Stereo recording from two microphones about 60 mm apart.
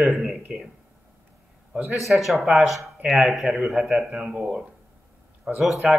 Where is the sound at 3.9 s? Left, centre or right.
Right.